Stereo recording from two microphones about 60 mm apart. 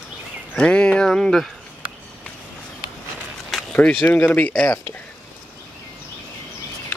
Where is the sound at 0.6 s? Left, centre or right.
Centre.